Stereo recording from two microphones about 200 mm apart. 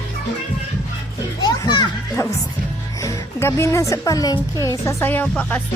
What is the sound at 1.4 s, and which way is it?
Children playing, 20° left (ahead or behind).